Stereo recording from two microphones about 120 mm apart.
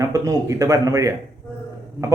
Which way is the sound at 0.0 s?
25° right (ahead or behind).